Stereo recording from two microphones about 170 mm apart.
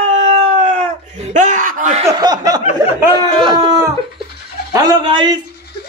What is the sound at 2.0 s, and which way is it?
Speech, 25° right (ahead or behind).